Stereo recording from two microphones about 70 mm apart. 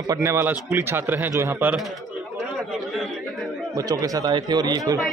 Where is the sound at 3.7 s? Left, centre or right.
Right.